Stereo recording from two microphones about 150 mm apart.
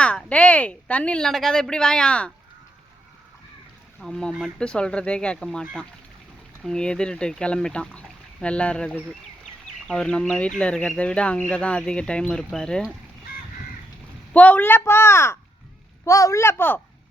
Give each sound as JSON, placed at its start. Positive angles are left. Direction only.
{"t": 0.0, "sound": "speech", "side_deg": 10}
{"t": 4.0, "sound": "speech", "side_deg": 5}
{"t": 14.3, "sound": "speech", "side_deg": 10}